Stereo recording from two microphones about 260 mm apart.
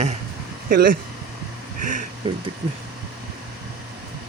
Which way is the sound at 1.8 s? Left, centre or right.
Right.